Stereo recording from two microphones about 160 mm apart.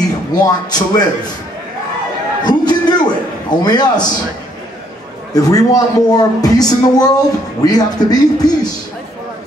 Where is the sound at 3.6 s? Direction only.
25° left (ahead or behind).